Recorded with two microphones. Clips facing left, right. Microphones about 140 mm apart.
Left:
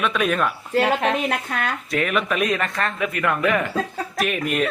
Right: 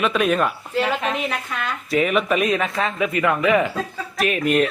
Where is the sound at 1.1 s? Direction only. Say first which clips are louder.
Left 2 dB; 50° left (ahead or behind).